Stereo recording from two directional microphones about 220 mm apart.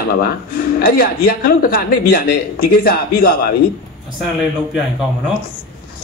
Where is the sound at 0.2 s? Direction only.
40° left (ahead or behind).